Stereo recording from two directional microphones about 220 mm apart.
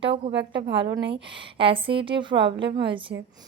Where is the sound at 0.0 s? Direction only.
25° right (ahead or behind).